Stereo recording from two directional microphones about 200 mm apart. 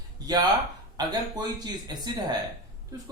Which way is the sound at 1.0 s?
20° right (ahead or behind).